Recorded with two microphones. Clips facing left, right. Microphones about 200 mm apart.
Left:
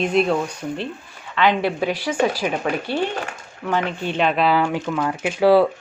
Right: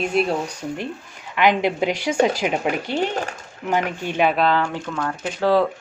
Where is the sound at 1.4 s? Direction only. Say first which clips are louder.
Right 1 dB; 15° right (ahead or behind).